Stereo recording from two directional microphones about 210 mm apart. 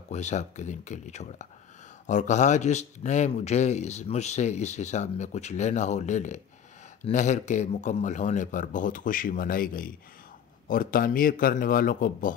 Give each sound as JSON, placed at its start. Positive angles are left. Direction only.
{"t": 0.1, "sound": "a man's voice", "side_deg": 35}